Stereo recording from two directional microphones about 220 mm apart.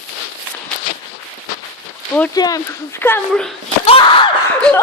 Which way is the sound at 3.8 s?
25° left (ahead or behind).